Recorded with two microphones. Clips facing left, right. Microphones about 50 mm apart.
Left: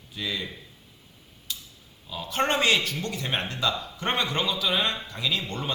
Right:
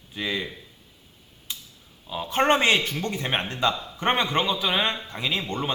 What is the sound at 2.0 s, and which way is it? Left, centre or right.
Speech, right.